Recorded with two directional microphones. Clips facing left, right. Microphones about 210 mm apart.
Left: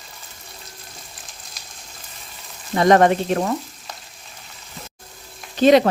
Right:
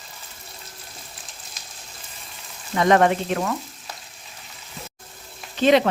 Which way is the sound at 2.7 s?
40° left (ahead or behind).